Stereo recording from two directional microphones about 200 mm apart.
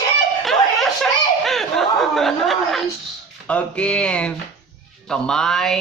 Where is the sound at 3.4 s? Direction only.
5° left (ahead or behind).